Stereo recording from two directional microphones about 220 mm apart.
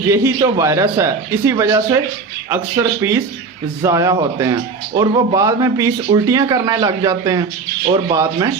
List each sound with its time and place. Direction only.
0.1 s a man's voice: 15° right (ahead or behind)
7.9 s speech: 25° right (ahead or behind)
8.1 s a man's voice: 15° right (ahead or behind)